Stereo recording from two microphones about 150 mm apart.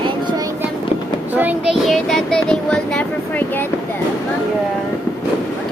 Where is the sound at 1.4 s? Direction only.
10° right (ahead or behind).